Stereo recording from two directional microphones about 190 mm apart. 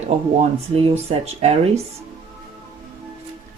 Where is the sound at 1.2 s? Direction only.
35° right (ahead or behind).